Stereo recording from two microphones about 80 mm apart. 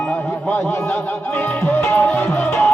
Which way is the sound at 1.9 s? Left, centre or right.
Left.